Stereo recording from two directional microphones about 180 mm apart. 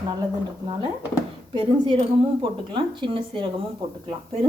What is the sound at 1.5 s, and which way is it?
A woman's voice, 30° right (ahead or behind).